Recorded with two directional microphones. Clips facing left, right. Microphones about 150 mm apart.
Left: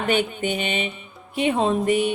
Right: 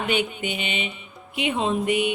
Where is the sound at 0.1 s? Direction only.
45° left (ahead or behind).